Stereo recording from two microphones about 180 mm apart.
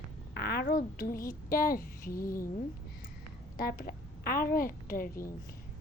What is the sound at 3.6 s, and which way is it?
A woman's voice, 55° left (ahead or behind).